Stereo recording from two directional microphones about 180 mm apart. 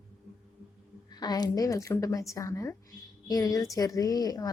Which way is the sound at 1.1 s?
20° left (ahead or behind).